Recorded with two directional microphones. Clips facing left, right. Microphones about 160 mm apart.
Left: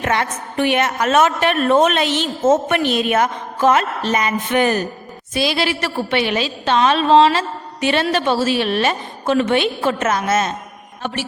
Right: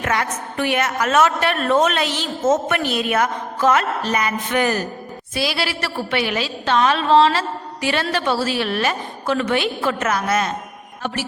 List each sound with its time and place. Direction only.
0.0 s a woman's voice: 25° left (ahead or behind)